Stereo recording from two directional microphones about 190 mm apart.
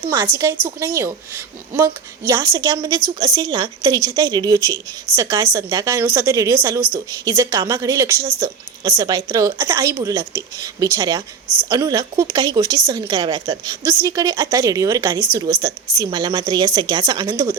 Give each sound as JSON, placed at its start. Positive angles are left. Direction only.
{"t": 0.9, "sound": "a woman's voice", "side_deg": -15}